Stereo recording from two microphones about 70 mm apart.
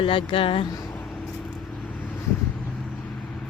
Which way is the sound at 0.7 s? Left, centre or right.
Left.